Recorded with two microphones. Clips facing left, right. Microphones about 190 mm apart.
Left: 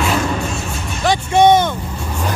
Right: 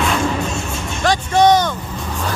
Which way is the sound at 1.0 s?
20° left (ahead or behind).